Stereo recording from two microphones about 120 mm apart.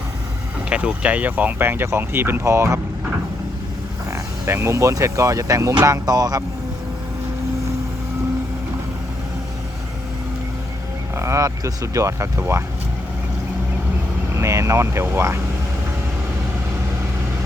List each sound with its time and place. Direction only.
0.7 s speech: 10° right (ahead or behind)
4.1 s speech: 25° right (ahead or behind)
11.1 s speech: 25° right (ahead or behind)
14.3 s speech: 25° right (ahead or behind)